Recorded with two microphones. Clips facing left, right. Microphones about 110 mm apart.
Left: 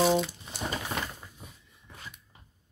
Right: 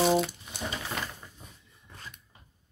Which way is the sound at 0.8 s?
15° left (ahead or behind).